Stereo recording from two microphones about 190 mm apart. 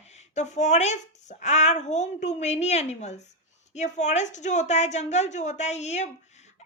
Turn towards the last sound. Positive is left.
turn(degrees=35)  # may be behind; listen again after turning